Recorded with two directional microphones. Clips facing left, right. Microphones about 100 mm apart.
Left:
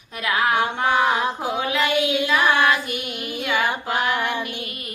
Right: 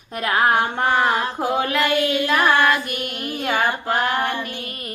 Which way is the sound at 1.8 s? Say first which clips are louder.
Right 1 dB; 15° left (ahead or behind).